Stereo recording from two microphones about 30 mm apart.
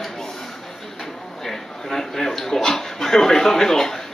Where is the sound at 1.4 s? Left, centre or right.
Centre.